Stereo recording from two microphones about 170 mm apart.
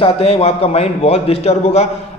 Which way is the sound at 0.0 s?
35° left (ahead or behind).